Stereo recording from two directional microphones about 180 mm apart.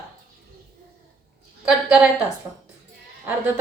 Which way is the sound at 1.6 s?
5° right (ahead or behind).